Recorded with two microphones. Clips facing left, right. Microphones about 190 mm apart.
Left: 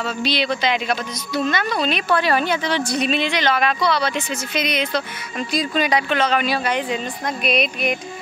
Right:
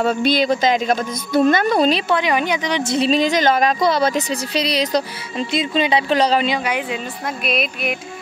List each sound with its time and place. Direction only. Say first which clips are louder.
0.0 s a woman's voice: right 6 dB; 50° right (ahead or behind)
2.0 s a woman's voice: right 1 dB; 20° right (ahead or behind)
3.1 s speech: right 7 dB; 40° right (ahead or behind)
6.4 s speech: right 1 dB; 15° right (ahead or behind)